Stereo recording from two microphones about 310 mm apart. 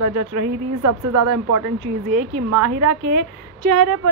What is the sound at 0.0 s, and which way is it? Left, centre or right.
A woman's voice, right.